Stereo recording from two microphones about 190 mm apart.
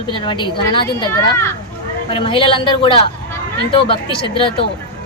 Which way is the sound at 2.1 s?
30° left (ahead or behind).